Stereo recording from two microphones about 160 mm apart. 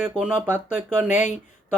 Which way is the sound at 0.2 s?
10° right (ahead or behind).